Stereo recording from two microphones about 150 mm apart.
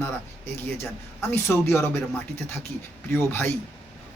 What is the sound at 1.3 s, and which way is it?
Speech, 15° left (ahead or behind).